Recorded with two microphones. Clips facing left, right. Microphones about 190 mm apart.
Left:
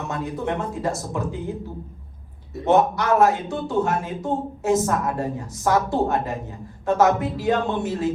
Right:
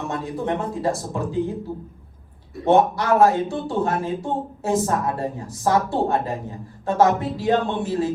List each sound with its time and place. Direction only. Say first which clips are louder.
0.1 s speech: even; 30° right (ahead or behind)
2.6 s speech: right 1 dB; 30° right (ahead or behind)